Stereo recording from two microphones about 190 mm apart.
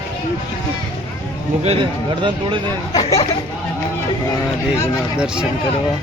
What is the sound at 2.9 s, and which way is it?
Speech, 25° left (ahead or behind).